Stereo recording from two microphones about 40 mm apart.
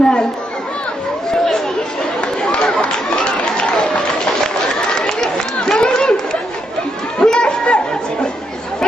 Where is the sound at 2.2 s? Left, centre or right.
Left.